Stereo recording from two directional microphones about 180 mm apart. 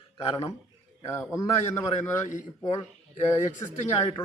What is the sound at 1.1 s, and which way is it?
A man's voice, 15° left (ahead or behind).